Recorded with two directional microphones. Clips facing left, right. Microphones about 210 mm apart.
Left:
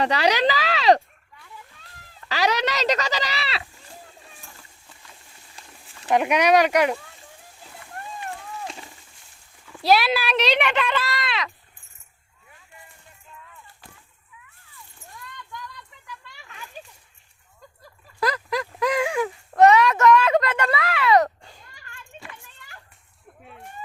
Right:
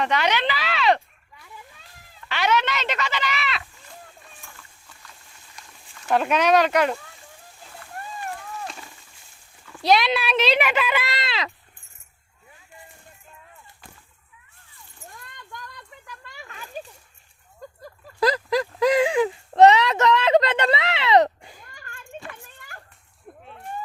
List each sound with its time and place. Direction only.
0.0 s speech: 35° left (ahead or behind)
2.3 s speech: 35° left (ahead or behind)
4.2 s splash: 30° left (ahead or behind)
5.6 s a sound: 30° left (ahead or behind)
6.1 s speech: 15° left (ahead or behind)
8.6 s a sound: 20° left (ahead or behind)
9.6 s speech: 5° left (ahead or behind)
11.0 s speech: 25° right (ahead or behind)
15.2 s a sound: 50° right (ahead or behind)
18.2 s clip-clop: 30° right (ahead or behind)
19.0 s speech: 20° right (ahead or behind)
21.6 s children playing: 50° right (ahead or behind)